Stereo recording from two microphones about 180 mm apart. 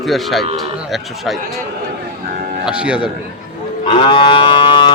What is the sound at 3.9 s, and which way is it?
Livestock, 30° left (ahead or behind).